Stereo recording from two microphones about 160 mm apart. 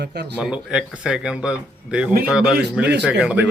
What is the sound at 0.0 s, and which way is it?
Speech, 90° right.